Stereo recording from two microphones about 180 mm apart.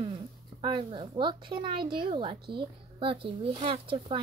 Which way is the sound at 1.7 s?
55° right (ahead or behind).